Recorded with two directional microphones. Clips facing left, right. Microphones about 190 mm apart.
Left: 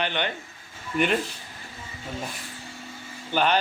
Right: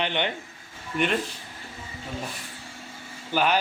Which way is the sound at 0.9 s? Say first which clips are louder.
Left 2 dB; 5° left (ahead or behind).